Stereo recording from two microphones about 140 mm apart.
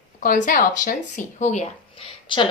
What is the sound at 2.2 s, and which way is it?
Speech, 35° left (ahead or behind).